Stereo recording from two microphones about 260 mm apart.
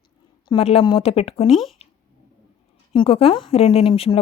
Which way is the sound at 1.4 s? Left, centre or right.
Centre.